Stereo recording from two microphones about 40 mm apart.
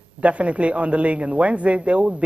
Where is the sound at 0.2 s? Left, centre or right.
Right.